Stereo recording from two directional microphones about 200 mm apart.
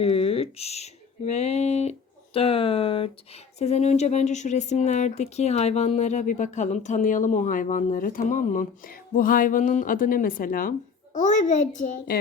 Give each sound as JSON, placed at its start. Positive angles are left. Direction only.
{"t": 0.0, "sound": "speech", "side_deg": 30}